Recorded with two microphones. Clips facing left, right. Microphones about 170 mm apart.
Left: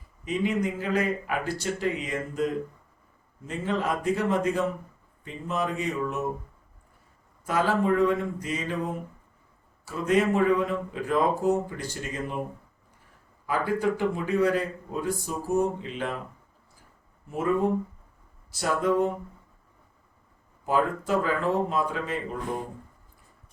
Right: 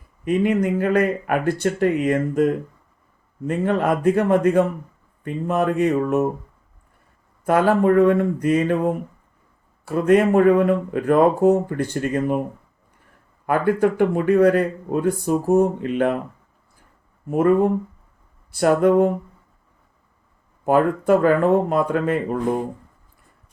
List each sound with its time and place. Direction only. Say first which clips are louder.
0.3 s speech: right 8 dB; 55° right (ahead or behind)
7.4 s speech: right 8 dB; 55° right (ahead or behind)
13.5 s speech: right 7 dB; 55° right (ahead or behind)
17.2 s speech: right 8 dB; 55° right (ahead or behind)
20.7 s speech: right 9 dB; 60° right (ahead or behind)